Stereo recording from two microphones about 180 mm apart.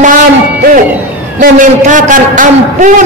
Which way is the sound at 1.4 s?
45° right (ahead or behind).